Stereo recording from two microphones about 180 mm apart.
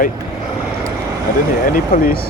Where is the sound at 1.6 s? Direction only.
50° left (ahead or behind).